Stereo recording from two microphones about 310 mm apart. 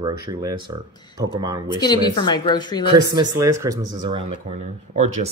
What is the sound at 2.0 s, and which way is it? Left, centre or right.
Speech, centre.